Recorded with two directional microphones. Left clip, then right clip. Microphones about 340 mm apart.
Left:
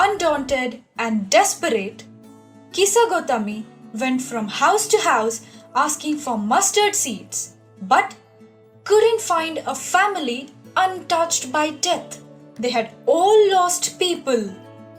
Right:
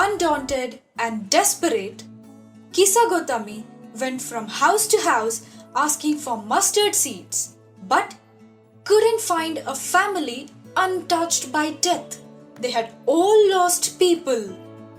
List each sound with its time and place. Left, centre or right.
0.2 s a woman's voice: centre